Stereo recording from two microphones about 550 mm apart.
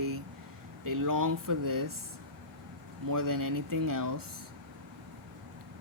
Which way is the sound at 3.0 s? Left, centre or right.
Right.